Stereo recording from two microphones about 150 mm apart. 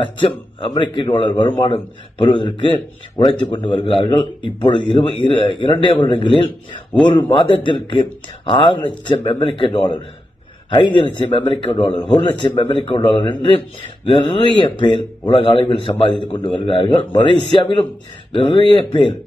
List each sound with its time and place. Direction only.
0.0 s a man's voice: 35° left (ahead or behind)